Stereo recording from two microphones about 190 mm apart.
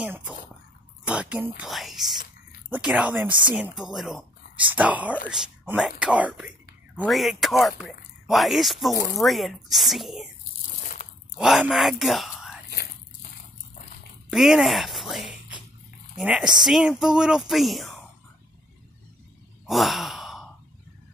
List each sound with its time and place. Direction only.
0.0 s a sound: 5° right (ahead or behind)
1.6 s speech: centre (ahead or behind)
10.7 s crunch: 45° left (ahead or behind)
11.3 s speech: 5° right (ahead or behind)
12.6 s biting: 55° left (ahead or behind)
14.3 s speech: centre (ahead or behind)
19.6 s sigh: centre (ahead or behind)